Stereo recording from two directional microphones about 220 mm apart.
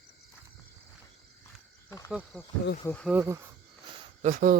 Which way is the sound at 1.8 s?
15° left (ahead or behind).